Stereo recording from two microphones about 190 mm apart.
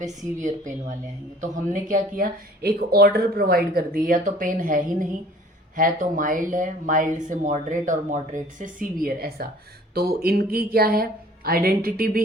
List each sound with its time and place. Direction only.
0.0 s speech: 40° right (ahead or behind)